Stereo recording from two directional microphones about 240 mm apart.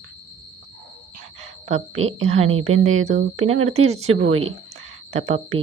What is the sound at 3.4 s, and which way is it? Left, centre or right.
Speech, right.